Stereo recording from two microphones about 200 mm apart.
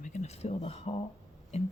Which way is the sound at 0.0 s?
35° left (ahead or behind).